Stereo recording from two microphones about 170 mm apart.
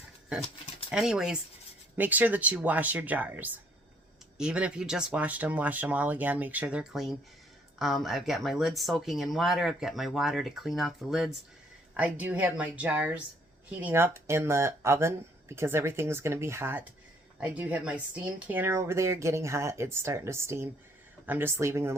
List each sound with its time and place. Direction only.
0.9 s speech: 5° right (ahead or behind)